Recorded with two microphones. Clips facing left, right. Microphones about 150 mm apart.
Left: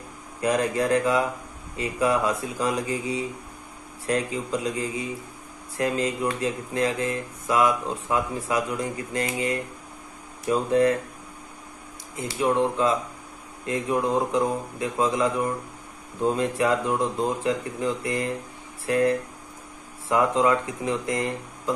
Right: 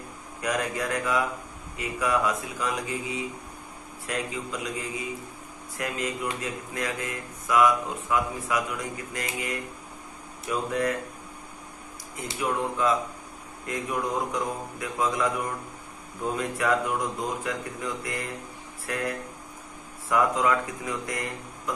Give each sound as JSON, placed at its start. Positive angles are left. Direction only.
{"t": 0.4, "sound": "speech", "side_deg": 30}
{"t": 12.4, "sound": "speech", "side_deg": 30}
{"t": 20.1, "sound": "speech", "side_deg": 25}